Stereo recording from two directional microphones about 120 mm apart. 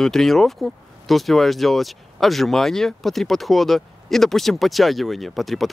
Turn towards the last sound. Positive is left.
turn(degrees=0)  # may be behind; listen again after turning